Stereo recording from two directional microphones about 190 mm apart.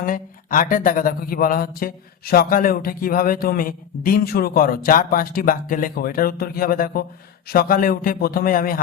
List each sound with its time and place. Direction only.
0.0 s speech: 45° left (ahead or behind)